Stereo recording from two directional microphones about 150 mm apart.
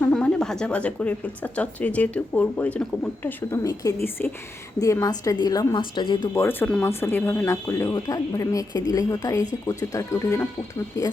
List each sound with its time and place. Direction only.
0.0 s a woman's voice: 10° left (ahead or behind)
3.5 s speech: 20° left (ahead or behind)
6.3 s speech: 15° left (ahead or behind)